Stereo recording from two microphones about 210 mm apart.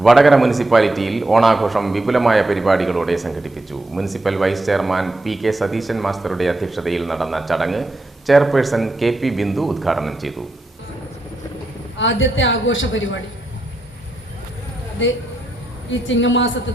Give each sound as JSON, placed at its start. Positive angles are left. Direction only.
{"t": 0.0, "sound": "a man's voice", "side_deg": 0}
{"t": 11.9, "sound": "a woman's voice", "side_deg": 65}
{"t": 15.0, "sound": "a woman's voice", "side_deg": 60}